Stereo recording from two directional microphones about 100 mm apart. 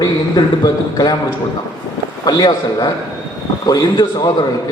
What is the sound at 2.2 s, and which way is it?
Speech, 40° left (ahead or behind).